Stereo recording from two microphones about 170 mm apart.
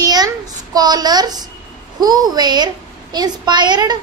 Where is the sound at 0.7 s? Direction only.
25° right (ahead or behind).